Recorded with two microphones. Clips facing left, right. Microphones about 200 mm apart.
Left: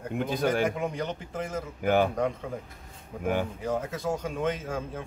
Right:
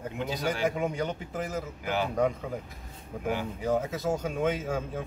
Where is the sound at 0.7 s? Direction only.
5° right (ahead or behind).